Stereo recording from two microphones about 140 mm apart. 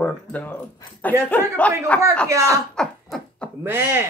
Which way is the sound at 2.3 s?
20° right (ahead or behind).